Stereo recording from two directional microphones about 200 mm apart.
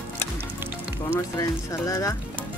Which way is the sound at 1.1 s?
15° left (ahead or behind).